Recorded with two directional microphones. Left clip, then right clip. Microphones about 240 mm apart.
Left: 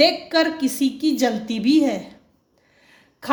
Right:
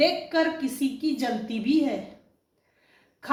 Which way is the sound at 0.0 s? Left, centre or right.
Left.